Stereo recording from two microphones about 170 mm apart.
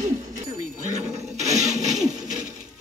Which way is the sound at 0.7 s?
45° right (ahead or behind).